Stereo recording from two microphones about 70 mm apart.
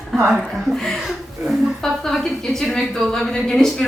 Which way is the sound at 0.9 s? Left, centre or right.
Centre.